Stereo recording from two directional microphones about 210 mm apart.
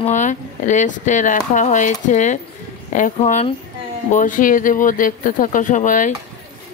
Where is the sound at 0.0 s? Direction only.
35° left (ahead or behind).